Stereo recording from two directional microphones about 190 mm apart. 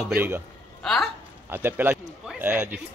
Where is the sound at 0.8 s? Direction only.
Centre (ahead or behind).